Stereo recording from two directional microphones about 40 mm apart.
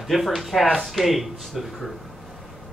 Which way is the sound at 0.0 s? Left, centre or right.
Centre.